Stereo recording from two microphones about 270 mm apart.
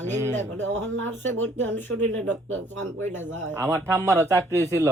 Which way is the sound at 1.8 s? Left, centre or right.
Centre.